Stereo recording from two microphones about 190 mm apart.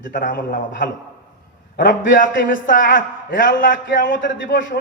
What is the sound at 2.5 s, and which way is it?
Speech, 45° left (ahead or behind).